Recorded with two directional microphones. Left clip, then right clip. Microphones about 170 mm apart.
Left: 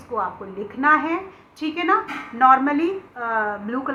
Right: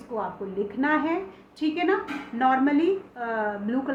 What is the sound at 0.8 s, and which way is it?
A woman's voice, 30° right (ahead or behind).